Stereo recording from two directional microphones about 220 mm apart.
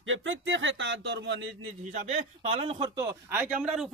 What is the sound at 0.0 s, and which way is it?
Speech, 60° right (ahead or behind).